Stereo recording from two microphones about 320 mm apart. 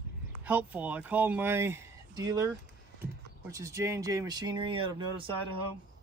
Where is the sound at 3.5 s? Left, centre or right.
Centre.